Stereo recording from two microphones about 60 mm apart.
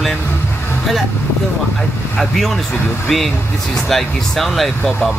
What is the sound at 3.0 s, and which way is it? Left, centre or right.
Speech, centre.